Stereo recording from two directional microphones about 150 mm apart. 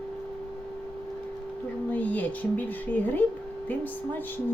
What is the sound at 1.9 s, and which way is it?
Speech, 10° left (ahead or behind).